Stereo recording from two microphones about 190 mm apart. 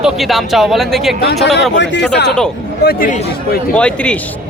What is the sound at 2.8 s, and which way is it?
Speech, 50° left (ahead or behind).